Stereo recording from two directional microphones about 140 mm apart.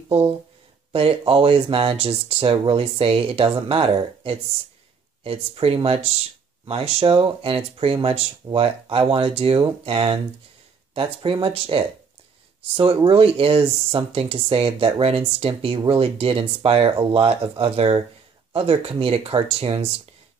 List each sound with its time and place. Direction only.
0.9 s speech: 40° right (ahead or behind)